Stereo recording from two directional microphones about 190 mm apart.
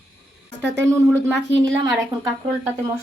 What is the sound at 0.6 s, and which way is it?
Speech, 15° right (ahead or behind).